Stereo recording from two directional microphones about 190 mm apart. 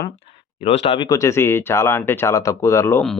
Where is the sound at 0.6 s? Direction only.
30° left (ahead or behind).